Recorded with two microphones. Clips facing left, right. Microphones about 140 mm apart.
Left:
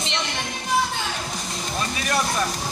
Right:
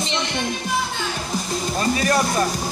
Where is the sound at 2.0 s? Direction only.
35° right (ahead or behind).